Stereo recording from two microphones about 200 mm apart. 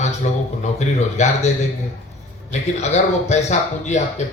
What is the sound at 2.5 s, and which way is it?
Speech, 35° left (ahead or behind).